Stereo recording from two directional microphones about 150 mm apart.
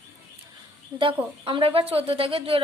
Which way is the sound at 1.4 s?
35° right (ahead or behind).